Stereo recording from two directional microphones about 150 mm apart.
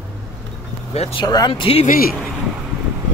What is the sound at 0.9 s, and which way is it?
Speech, 45° left (ahead or behind).